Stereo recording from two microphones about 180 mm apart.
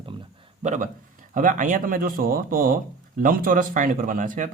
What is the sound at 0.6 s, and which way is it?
Speech, 40° right (ahead or behind).